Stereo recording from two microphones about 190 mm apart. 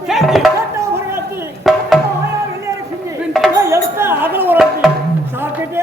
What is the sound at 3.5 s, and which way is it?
Music, 15° right (ahead or behind).